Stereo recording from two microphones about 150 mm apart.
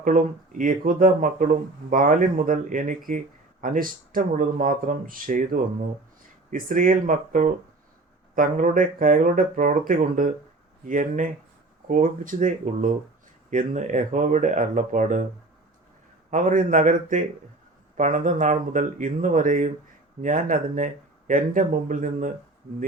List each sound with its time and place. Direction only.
0.0 s speech: 60° right (ahead or behind)
16.3 s speech: 60° right (ahead or behind)